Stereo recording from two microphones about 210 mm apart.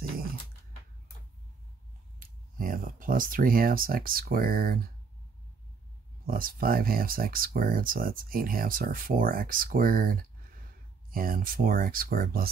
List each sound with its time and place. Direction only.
0.1 s a sound: 45° right (ahead or behind)
2.5 s speech: 40° right (ahead or behind)
6.2 s speech: 45° right (ahead or behind)